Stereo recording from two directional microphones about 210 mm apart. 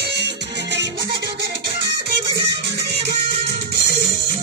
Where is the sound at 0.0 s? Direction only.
55° right (ahead or behind).